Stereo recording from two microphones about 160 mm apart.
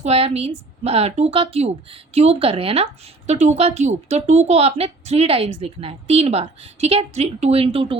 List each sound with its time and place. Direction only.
0.0 s a woman's voice: 40° right (ahead or behind)